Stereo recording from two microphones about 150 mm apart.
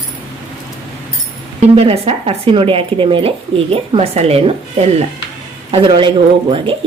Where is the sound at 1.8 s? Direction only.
40° right (ahead or behind).